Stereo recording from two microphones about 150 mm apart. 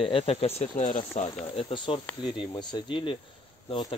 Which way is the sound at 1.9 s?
35° left (ahead or behind).